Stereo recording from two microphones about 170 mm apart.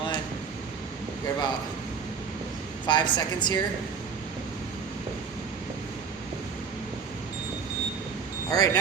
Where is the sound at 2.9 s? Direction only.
25° left (ahead or behind).